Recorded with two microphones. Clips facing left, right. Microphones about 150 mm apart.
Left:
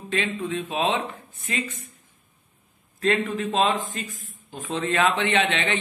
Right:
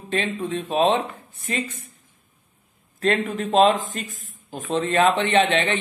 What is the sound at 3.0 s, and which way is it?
A man's voice, 45° right (ahead or behind).